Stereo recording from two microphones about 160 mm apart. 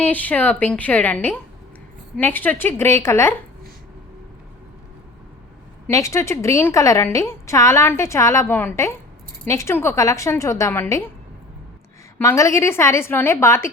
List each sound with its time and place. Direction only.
0.0 s a woman's voice: 10° left (ahead or behind)
5.9 s a woman's voice: 20° left (ahead or behind)
12.2 s a woman's voice: 20° left (ahead or behind)